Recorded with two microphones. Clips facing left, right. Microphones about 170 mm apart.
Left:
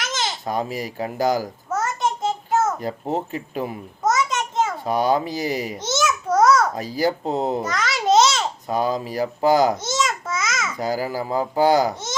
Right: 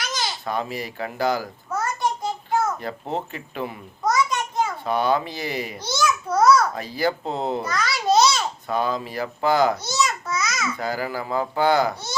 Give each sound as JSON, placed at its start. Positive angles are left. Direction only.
{"t": 0.0, "sound": "babbling", "side_deg": 20}
{"t": 0.4, "sound": "speech", "side_deg": 40}
{"t": 1.7, "sound": "a sound", "side_deg": 20}
{"t": 3.1, "sound": "speech", "side_deg": 40}
{"t": 4.0, "sound": "a sound", "side_deg": 20}
{"t": 4.9, "sound": "speech", "side_deg": 40}
{"t": 5.7, "sound": "babbling", "side_deg": 20}
{"t": 6.2, "sound": "a child's voice", "side_deg": 45}
{"t": 7.6, "sound": "babbling", "side_deg": 20}
{"t": 8.7, "sound": "speech", "side_deg": 40}
{"t": 9.8, "sound": "babbling", "side_deg": 25}
{"t": 10.8, "sound": "speech", "side_deg": 40}